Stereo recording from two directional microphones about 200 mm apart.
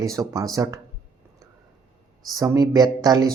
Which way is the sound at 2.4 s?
15° right (ahead or behind).